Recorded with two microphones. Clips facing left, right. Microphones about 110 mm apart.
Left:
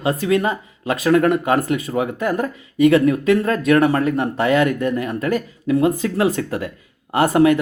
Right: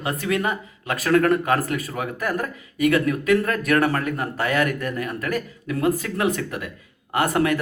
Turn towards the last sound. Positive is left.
turn(degrees=25)  # may be behind; listen again after turning